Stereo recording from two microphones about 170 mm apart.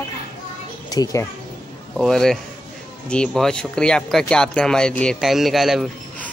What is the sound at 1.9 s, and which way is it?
Speech, centre (ahead or behind).